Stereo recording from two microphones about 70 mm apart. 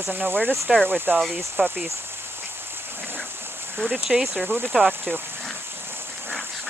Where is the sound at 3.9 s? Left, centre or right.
Centre.